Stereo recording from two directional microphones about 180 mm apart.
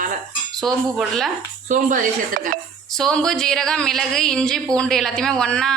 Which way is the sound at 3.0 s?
5° left (ahead or behind).